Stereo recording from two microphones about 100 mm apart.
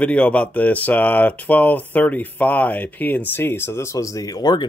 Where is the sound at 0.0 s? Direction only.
15° left (ahead or behind).